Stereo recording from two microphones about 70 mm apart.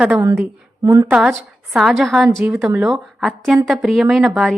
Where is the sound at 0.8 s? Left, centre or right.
Right.